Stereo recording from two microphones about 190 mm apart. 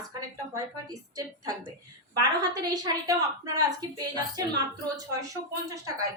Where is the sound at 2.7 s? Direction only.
20° right (ahead or behind).